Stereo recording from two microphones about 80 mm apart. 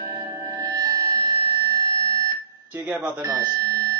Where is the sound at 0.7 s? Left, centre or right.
Right.